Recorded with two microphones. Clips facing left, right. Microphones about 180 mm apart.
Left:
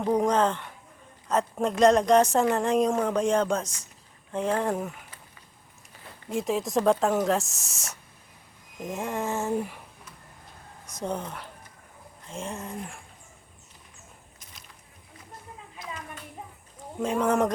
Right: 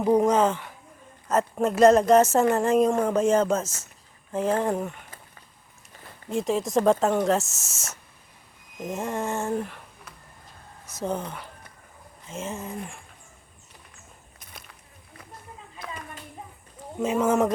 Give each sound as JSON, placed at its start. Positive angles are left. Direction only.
{"t": 0.0, "sound": "speech", "side_deg": -10}
{"t": 6.2, "sound": "speech", "side_deg": 0}
{"t": 10.8, "sound": "speech", "side_deg": -5}
{"t": 14.3, "sound": "a sound", "side_deg": -55}
{"t": 17.0, "sound": "speech", "side_deg": -5}